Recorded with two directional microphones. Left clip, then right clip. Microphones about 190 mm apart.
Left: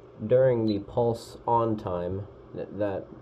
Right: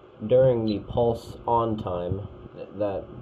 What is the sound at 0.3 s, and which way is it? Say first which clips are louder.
Speech: right 2 dB; 20° left (ahead or behind).